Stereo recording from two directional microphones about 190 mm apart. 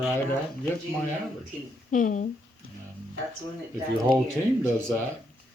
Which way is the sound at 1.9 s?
45° left (ahead or behind).